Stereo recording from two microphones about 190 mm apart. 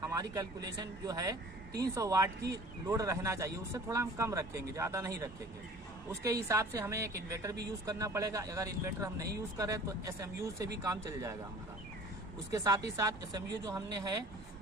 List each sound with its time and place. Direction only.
0.1 s speech: 15° right (ahead or behind)
12.5 s speech: 15° right (ahead or behind)